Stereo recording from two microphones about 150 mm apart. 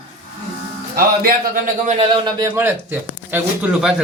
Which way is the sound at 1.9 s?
40° right (ahead or behind).